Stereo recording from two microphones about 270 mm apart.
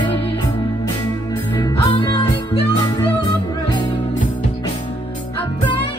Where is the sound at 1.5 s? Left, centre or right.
Centre.